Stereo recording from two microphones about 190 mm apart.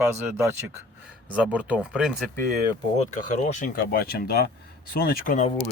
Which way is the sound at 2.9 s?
40° left (ahead or behind).